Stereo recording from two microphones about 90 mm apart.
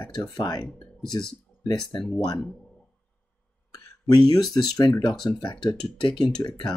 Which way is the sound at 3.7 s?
45° left (ahead or behind).